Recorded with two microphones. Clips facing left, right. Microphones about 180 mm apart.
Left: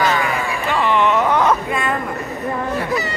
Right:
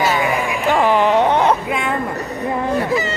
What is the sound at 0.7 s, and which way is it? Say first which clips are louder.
Speech: right 2 dB; 40° right (ahead or behind).